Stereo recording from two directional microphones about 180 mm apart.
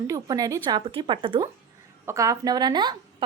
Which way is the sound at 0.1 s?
20° right (ahead or behind).